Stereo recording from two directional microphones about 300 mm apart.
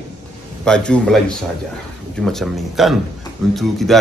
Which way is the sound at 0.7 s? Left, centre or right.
Centre.